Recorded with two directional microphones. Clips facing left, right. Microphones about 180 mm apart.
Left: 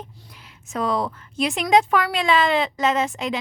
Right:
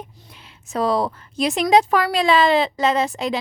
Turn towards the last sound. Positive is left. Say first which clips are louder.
# right 2 dB
turn(degrees=-35)  # may be behind; listen again after turning